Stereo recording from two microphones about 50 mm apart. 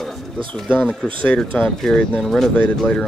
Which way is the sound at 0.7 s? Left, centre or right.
Left.